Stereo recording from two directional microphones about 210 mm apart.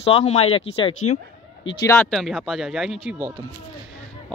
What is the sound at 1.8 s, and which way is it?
Speech, 15° left (ahead or behind).